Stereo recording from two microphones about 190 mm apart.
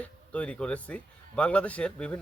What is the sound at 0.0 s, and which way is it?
Speech, 5° left (ahead or behind).